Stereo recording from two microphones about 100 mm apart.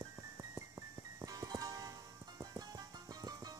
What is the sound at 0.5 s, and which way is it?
Music, 30° right (ahead or behind).